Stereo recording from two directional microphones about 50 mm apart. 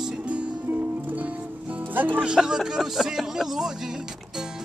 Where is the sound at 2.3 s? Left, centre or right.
Centre.